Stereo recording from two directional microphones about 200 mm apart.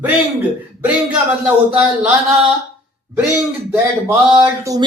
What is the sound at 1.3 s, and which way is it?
Speech, 5° right (ahead or behind).